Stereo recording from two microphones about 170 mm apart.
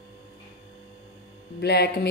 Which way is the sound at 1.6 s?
75° left (ahead or behind).